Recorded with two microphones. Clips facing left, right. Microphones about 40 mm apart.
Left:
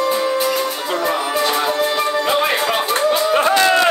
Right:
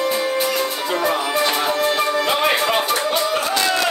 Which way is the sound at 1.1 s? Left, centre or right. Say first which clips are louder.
Left 1 dB; centre.